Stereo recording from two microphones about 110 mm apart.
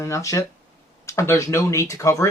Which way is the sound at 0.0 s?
30° left (ahead or behind).